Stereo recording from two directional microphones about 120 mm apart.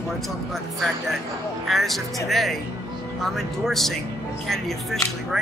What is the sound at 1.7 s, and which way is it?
Speech, centre (ahead or behind).